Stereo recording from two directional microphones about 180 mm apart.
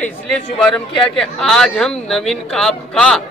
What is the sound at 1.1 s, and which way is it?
Speech, 5° left (ahead or behind).